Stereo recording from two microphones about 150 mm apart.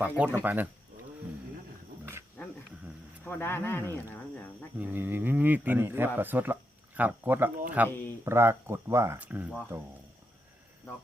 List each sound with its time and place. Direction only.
0.0 s speech: 10° right (ahead or behind)
2.4 s dog: 10° left (ahead or behind)
3.2 s speech: 15° left (ahead or behind)
4.8 s speech: 15° right (ahead or behind)
7.9 s speech: 15° left (ahead or behind)
8.2 s speech: 15° right (ahead or behind)